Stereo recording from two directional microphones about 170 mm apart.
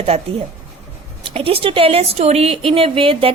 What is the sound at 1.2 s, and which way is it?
A woman's voice, 35° right (ahead or behind).